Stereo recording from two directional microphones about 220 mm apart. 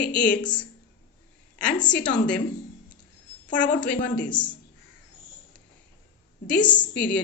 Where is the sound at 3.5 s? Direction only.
5° left (ahead or behind).